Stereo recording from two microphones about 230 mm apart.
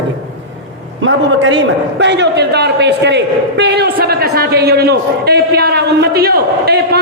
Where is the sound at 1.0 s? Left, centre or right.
Right.